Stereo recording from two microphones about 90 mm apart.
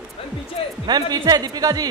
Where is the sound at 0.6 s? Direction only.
90° left.